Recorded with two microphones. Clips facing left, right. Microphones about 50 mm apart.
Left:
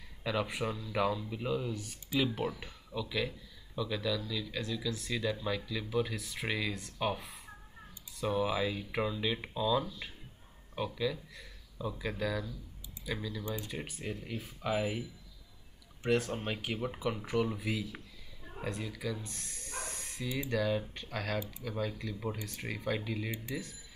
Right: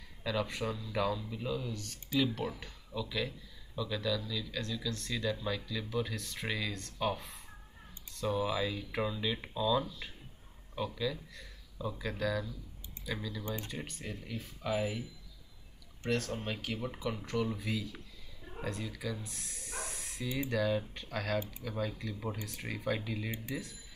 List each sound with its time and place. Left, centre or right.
0.2 s speech: centre